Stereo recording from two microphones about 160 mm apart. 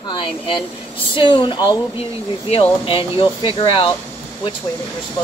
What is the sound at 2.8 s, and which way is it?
Speech, 35° left (ahead or behind).